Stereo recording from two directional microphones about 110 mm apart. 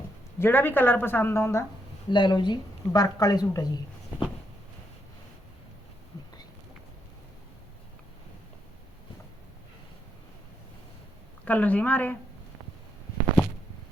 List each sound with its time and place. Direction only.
0.3 s speech: 20° left (ahead or behind)
2.0 s speech: 45° left (ahead or behind)
4.1 s a sound: 20° right (ahead or behind)
11.4 s a woman's voice: 15° left (ahead or behind)